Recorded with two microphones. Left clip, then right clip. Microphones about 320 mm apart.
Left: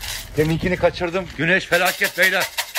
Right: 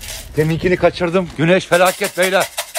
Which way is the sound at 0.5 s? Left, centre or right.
Right.